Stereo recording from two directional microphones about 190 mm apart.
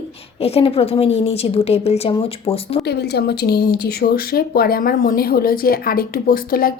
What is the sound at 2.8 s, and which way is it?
Speech, 60° left (ahead or behind).